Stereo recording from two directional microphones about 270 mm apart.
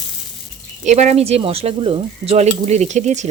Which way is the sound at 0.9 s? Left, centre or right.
Right.